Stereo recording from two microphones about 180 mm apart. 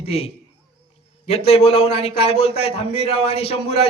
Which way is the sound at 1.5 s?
35° left (ahead or behind).